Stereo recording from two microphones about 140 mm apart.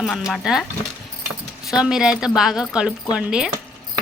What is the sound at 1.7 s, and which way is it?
Speech, 5° right (ahead or behind).